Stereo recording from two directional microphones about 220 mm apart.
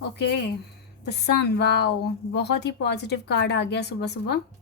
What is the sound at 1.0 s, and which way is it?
A woman's voice, 50° left (ahead or behind).